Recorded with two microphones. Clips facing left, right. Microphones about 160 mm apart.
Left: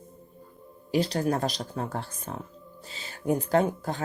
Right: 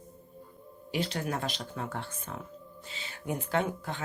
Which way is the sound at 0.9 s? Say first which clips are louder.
Left 7 dB; 40° left (ahead or behind).